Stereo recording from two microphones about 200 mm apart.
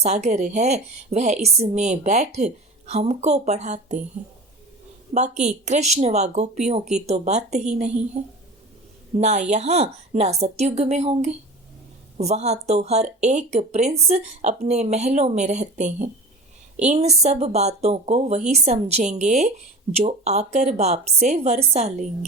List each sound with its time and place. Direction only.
0.0 s a woman's voice: 35° right (ahead or behind)
5.1 s a woman's voice: 35° right (ahead or behind)